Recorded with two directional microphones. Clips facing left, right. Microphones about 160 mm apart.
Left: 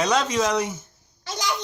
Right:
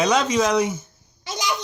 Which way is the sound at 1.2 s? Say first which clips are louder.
Right 2 dB; 20° right (ahead or behind).